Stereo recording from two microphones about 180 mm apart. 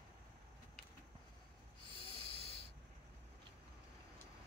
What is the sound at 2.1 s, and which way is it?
Snort, 30° left (ahead or behind).